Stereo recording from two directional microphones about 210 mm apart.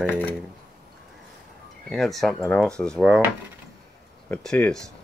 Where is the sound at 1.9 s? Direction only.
Centre (ahead or behind).